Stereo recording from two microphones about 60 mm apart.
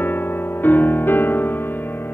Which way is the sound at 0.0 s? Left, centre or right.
Left.